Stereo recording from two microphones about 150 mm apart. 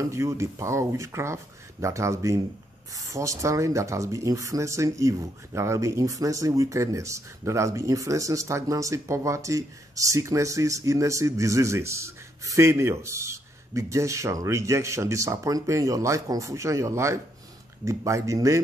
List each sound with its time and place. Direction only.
0.1 s speech: 20° right (ahead or behind)